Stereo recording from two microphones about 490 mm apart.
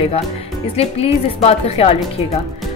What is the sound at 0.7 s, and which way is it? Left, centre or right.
Speech, centre.